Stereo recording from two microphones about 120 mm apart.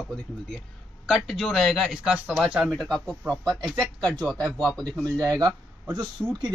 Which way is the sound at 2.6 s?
5° left (ahead or behind).